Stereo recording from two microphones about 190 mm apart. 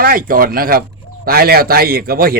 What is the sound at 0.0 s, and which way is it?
Speech, 50° right (ahead or behind).